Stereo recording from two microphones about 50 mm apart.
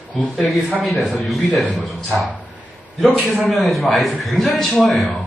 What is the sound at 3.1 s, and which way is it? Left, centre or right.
Speech, right.